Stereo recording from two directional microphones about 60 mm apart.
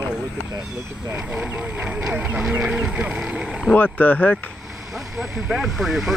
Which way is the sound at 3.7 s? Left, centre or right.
Left.